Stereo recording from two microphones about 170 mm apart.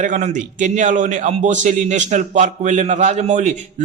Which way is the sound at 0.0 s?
45° right (ahead or behind).